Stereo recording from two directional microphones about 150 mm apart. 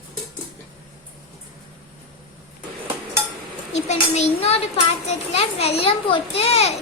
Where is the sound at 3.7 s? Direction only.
50° left (ahead or behind).